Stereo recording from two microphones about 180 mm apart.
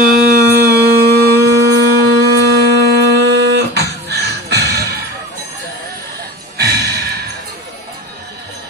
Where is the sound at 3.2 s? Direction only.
70° right (ahead or behind).